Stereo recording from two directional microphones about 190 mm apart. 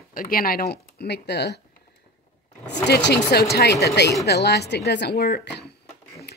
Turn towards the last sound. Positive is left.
turn(degrees=55)  # may be behind; listen again after turning